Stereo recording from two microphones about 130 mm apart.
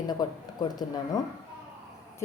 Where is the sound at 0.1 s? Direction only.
30° left (ahead or behind).